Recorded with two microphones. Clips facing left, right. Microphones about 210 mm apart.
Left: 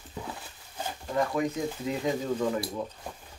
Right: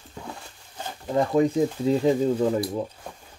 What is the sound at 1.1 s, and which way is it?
Speech, 30° right (ahead or behind).